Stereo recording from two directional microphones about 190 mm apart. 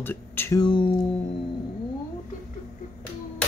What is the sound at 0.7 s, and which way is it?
Speech, 25° left (ahead or behind).